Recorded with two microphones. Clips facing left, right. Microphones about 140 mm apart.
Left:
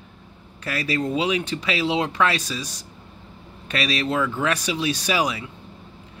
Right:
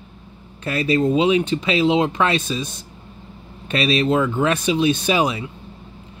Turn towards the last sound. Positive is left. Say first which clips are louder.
# right 4 dB
turn(degrees=-25)  # may be behind; listen again after turning